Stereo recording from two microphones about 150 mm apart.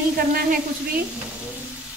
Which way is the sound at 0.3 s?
75° right (ahead or behind).